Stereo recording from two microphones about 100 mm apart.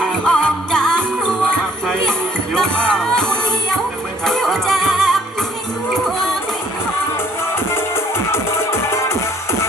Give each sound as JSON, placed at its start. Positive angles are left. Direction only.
{"t": 0.0, "sound": "music", "side_deg": 10}
{"t": 7.5, "sound": "music", "side_deg": 25}